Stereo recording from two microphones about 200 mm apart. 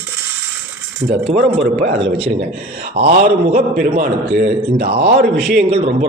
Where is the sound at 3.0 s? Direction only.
35° right (ahead or behind).